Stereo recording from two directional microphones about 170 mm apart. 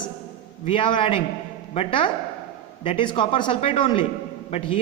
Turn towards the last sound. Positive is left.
turn(degrees=35)  # may be behind; listen again after turning